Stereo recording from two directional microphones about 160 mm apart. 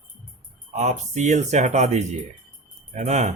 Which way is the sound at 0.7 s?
45° right (ahead or behind).